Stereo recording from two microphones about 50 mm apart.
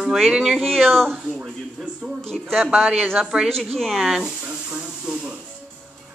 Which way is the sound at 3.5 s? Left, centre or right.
Centre.